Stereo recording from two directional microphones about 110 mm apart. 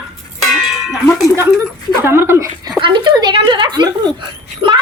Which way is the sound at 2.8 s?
45° right (ahead or behind).